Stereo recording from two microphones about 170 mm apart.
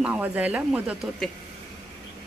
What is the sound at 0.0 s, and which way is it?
Speech, 10° right (ahead or behind).